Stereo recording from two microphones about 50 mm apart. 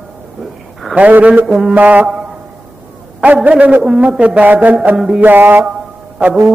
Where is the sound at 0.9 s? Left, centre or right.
Right.